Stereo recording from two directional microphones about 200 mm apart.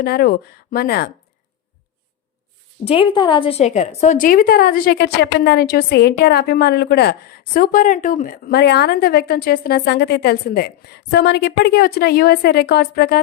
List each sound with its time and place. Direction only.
0.0 s a woman's voice: 50° left (ahead or behind)
2.8 s a woman's voice: 25° left (ahead or behind); by 13.2 s 50° left (ahead or behind)